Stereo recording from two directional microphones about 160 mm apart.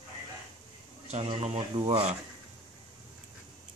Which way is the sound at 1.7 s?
30° right (ahead or behind).